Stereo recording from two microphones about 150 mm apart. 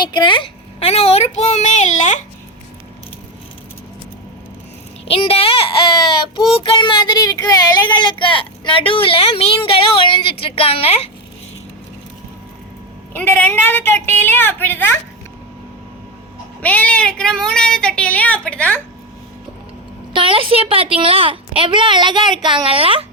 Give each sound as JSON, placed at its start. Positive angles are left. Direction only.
{"t": 0.0, "sound": "a child's voice", "side_deg": 30}
{"t": 5.0, "sound": "child singing", "side_deg": 40}
{"t": 6.6, "sound": "a sound", "side_deg": 35}
{"t": 13.1, "sound": "a woman's voice", "side_deg": 15}
{"t": 16.6, "sound": "a woman's voice", "side_deg": 10}
{"t": 20.1, "sound": "a woman's voice", "side_deg": -35}